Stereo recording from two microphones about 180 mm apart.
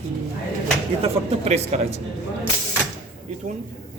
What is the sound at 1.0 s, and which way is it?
Speech, 35° right (ahead or behind).